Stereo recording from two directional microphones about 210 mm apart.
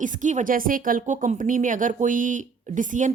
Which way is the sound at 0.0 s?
35° right (ahead or behind).